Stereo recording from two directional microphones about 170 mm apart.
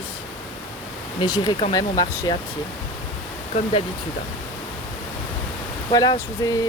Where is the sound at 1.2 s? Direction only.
25° left (ahead or behind).